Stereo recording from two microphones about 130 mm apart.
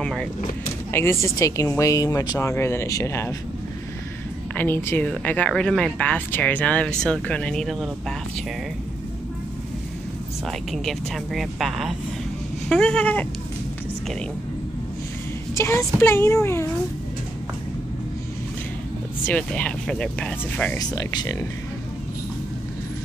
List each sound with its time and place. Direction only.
0.0 s speech: 5° left (ahead or behind)
1.2 s speech: 25° left (ahead or behind)
4.6 s speech: 15° left (ahead or behind)
10.7 s speech: centre (ahead or behind)
15.5 s speech: 20° left (ahead or behind)
19.2 s speech: 10° left (ahead or behind)
20.7 s speech: 30° left (ahead or behind)